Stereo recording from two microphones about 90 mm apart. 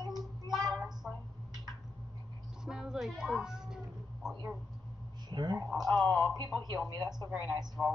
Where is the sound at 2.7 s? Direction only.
5° right (ahead or behind).